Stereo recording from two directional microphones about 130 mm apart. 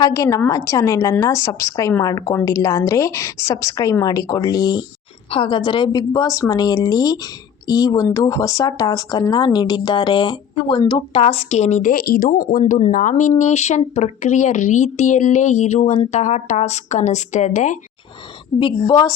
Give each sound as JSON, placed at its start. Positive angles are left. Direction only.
{"t": 0.0, "sound": "speech", "side_deg": 25}
{"t": 13.4, "sound": "speech", "side_deg": 60}
{"t": 18.5, "sound": "a woman's voice", "side_deg": 15}
{"t": 18.9, "sound": "speech", "side_deg": 30}